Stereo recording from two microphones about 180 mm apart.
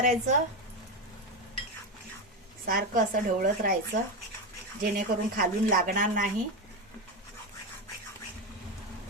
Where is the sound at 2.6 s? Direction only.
55° right (ahead or behind).